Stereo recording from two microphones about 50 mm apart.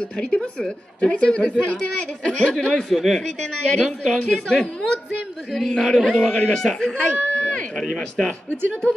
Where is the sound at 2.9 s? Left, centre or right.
Centre.